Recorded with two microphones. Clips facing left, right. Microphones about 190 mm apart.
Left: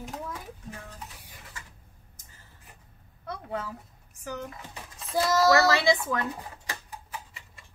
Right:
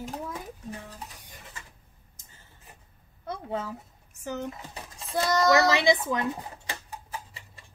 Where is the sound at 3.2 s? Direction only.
25° right (ahead or behind).